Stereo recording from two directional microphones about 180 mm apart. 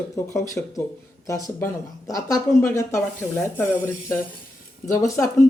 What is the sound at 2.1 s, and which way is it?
Speech, 20° left (ahead or behind).